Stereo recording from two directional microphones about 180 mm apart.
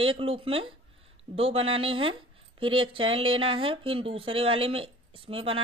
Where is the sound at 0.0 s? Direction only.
30° right (ahead or behind).